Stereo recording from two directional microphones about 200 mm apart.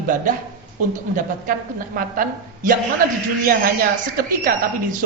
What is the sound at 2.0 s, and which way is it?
Speech, 45° right (ahead or behind).